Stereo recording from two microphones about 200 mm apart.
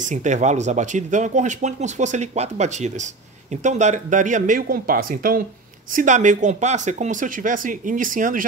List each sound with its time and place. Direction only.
0.0 s speech: 35° right (ahead or behind)